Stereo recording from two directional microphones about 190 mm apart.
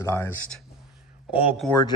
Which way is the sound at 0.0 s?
15° left (ahead or behind).